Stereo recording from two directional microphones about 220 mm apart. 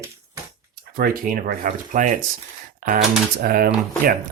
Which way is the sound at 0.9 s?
40° right (ahead or behind).